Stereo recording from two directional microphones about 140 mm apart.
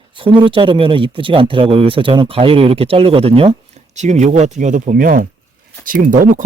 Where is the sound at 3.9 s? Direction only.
55° right (ahead or behind).